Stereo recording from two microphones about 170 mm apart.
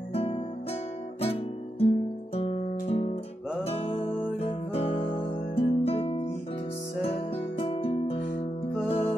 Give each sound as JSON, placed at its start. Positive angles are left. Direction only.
{"t": 0.1, "sound": "music", "side_deg": 35}
{"t": 1.2, "sound": "guitar", "side_deg": 35}
{"t": 3.6, "sound": "music", "side_deg": 35}